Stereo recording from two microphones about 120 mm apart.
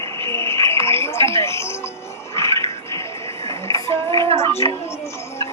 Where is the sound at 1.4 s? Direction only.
20° left (ahead or behind).